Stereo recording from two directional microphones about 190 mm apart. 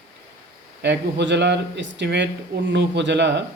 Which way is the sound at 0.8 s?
65° right (ahead or behind).